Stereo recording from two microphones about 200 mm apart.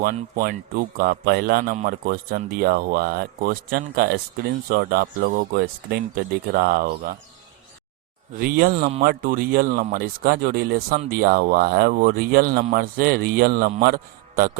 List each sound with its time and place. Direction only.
0.0 s speech: 45° right (ahead or behind)
8.4 s speech: 45° right (ahead or behind)
8.7 s speech: 35° right (ahead or behind)